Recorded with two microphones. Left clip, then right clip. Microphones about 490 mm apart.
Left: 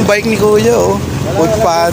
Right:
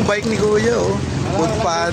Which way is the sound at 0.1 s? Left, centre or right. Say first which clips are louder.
Left 7 dB; right.